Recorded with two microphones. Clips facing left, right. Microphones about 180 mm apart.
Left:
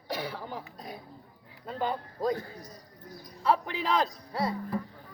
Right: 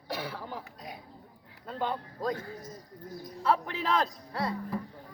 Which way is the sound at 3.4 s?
Centre (ahead or behind).